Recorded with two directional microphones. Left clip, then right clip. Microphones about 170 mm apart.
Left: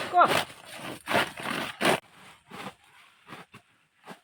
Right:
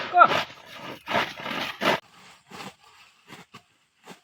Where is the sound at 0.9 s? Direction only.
30° left (ahead or behind).